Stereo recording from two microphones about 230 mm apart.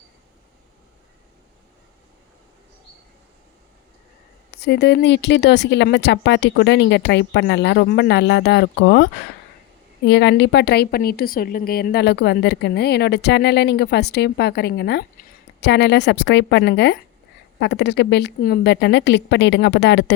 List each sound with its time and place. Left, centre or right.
4.5 s a woman's voice: left
10.1 s a woman's voice: left